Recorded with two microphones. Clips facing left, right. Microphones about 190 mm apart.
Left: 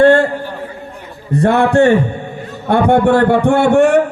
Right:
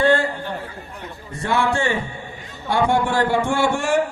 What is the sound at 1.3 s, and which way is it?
A man's voice, 65° left (ahead or behind).